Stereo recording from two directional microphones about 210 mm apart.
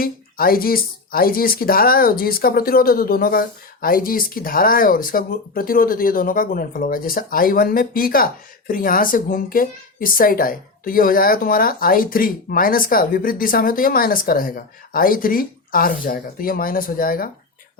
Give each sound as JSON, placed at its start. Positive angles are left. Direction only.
{"t": 0.0, "sound": "speech", "side_deg": 45}